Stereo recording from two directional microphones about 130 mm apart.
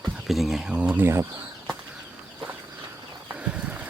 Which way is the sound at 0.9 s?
20° right (ahead or behind).